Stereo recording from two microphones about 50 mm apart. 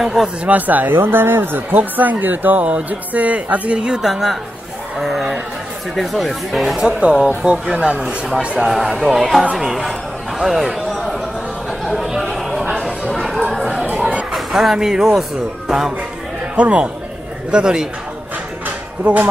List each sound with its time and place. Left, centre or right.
0.0 s a man's voice: centre
0.5 s speech: right
0.9 s speech: right
1.8 s speech: right
4.0 s speech: centre
6.8 s speech: centre
8.5 s speech: centre
12.0 s a sound: centre
13.1 s a sound: centre
13.9 s a sound: right
14.3 s speech: centre
16.5 s a man's voice: right
19.1 s speech: right